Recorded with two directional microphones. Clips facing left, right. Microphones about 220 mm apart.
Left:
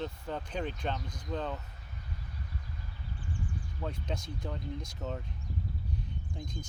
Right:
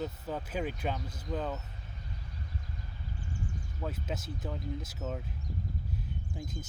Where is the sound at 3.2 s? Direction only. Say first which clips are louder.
Left 1 dB; 45° right (ahead or behind).